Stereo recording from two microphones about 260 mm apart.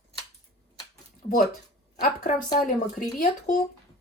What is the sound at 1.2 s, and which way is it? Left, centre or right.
Speech, left.